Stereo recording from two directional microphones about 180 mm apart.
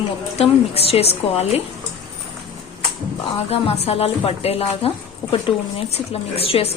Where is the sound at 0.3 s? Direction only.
35° left (ahead or behind).